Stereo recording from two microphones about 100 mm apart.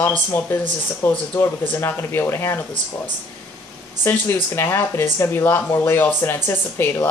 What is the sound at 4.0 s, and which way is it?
Speech, 25° left (ahead or behind).